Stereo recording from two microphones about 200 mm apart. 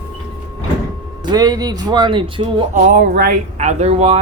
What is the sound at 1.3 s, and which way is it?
Speech, 20° right (ahead or behind).